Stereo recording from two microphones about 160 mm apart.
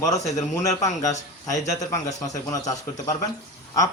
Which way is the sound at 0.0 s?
20° left (ahead or behind).